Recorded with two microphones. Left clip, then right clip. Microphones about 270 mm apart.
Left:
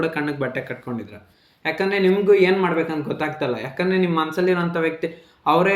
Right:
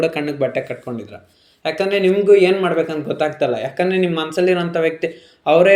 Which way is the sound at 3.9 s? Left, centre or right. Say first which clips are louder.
Right 1 dB; centre.